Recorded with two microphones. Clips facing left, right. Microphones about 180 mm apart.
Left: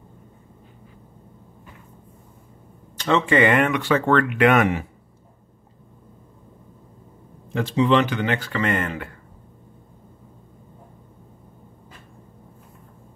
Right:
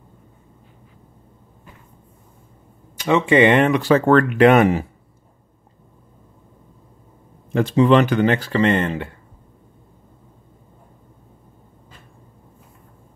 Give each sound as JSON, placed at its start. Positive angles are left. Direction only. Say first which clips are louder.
{"t": 3.0, "sound": "speech", "louder": "right 4 dB", "side_deg": -15}
{"t": 7.5, "sound": "speech", "louder": "right 4 dB", "side_deg": -50}